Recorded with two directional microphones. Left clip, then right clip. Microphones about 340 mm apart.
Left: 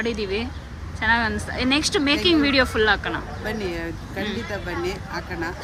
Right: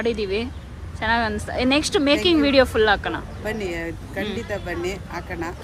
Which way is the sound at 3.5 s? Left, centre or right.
Centre.